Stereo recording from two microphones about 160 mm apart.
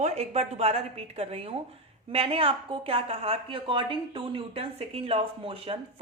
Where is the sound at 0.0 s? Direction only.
40° right (ahead or behind).